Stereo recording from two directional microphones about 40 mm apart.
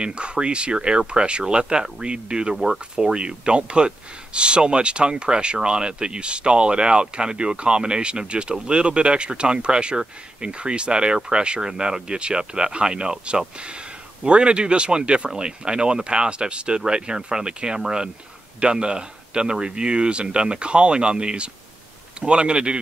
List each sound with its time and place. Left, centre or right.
0.0 s speech: right
2.5 s speech: centre
3.1 s speech: right